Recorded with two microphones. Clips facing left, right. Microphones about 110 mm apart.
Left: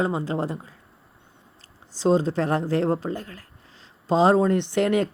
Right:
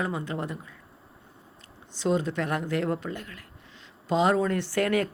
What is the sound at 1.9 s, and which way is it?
Speech, 30° left (ahead or behind).